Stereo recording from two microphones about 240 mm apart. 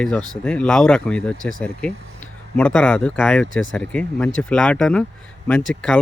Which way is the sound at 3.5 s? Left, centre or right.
Left.